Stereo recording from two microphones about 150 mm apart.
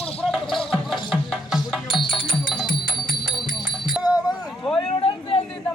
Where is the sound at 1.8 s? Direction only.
35° left (ahead or behind).